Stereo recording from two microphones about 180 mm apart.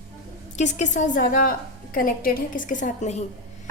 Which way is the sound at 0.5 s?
40° left (ahead or behind).